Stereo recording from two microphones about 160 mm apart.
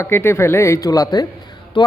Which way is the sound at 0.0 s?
15° left (ahead or behind).